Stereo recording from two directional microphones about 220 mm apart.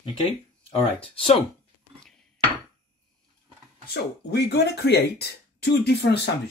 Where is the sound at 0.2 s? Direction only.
25° left (ahead or behind).